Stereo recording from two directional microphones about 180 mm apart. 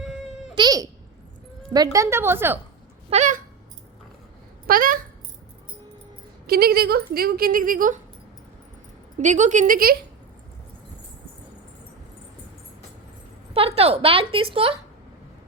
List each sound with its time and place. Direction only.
0.5 s a child's voice: 20° right (ahead or behind)
3.1 s a woman's voice: 40° right (ahead or behind)
4.6 s speech: 50° right (ahead or behind)
6.5 s a woman's voice: 60° right (ahead or behind)
9.1 s speech: 40° right (ahead or behind)
13.5 s a woman's voice: 35° right (ahead or behind)